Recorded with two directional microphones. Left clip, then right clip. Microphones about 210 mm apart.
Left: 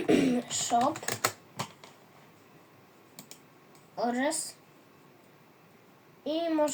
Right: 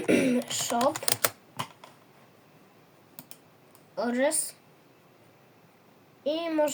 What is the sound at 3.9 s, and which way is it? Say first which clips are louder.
Speech: right 3 dB; 50° right (ahead or behind).